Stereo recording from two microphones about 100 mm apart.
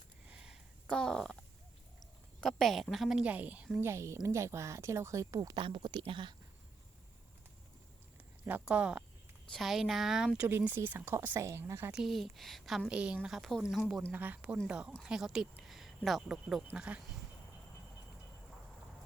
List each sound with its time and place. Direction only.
0.3 s a sound: 10° right (ahead or behind)
0.9 s speech: 5° left (ahead or behind)
2.4 s a woman's voice: 5° left (ahead or behind); by 3.7 s 15° right (ahead or behind)
3.8 s a woman's voice: 25° right (ahead or behind)
5.5 s speech: 55° right (ahead or behind)
8.4 s a woman's voice: 15° right (ahead or behind)
11.9 s a woman's voice: 5° right (ahead or behind)
12.9 s a woman's voice: 10° right (ahead or behind)
14.1 s a woman's voice: 15° right (ahead or behind)